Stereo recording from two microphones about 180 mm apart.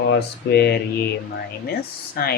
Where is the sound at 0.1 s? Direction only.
65° left (ahead or behind).